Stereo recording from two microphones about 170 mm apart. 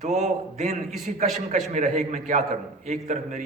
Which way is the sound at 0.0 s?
40° right (ahead or behind).